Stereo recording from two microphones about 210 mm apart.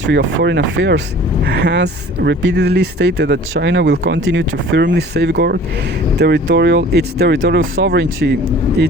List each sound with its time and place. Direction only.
0.0 s speech: 60° right (ahead or behind)